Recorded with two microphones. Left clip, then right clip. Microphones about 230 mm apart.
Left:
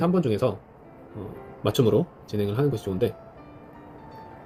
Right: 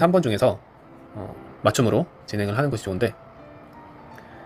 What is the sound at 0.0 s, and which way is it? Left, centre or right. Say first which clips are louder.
Speech: right 5 dB; right.